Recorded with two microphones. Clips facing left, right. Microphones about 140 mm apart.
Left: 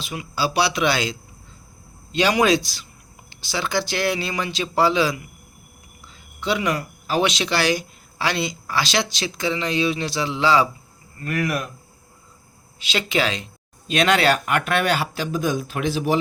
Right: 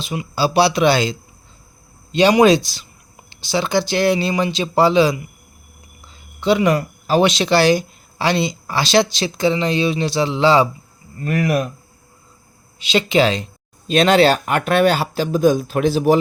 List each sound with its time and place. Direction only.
0.0 s speech: 25° right (ahead or behind)
2.1 s speech: 25° right (ahead or behind)
6.4 s speech: 30° right (ahead or behind)
12.8 s speech: 25° right (ahead or behind)